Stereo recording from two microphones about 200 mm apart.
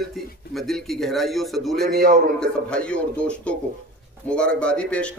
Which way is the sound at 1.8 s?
50° right (ahead or behind).